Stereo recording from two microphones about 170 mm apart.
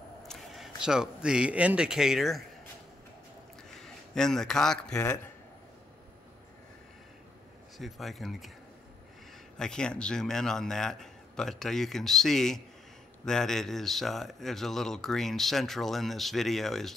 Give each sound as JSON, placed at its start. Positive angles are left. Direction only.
{"t": 0.3, "sound": "speech", "side_deg": 0}
{"t": 3.8, "sound": "a man's voice", "side_deg": 5}
{"t": 4.9, "sound": "a man's voice", "side_deg": 20}
{"t": 7.7, "sound": "speech", "side_deg": 0}
{"t": 9.6, "sound": "speech", "side_deg": 5}